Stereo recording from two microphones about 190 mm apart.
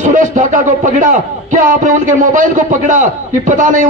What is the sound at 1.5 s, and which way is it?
A man's voice, 40° right (ahead or behind).